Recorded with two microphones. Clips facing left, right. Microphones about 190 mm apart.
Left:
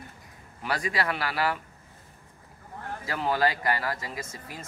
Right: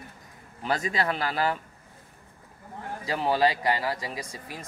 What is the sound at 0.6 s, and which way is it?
Speech, 25° right (ahead or behind).